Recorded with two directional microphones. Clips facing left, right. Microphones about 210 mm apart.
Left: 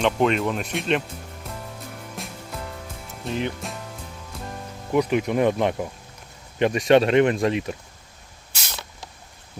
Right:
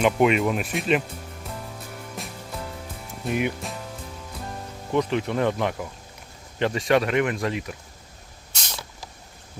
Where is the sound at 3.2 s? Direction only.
15° right (ahead or behind).